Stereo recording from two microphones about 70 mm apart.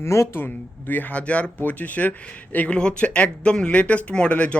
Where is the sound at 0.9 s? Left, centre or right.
Left.